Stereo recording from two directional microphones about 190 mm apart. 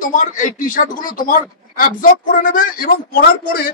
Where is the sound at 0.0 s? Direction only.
45° left (ahead or behind).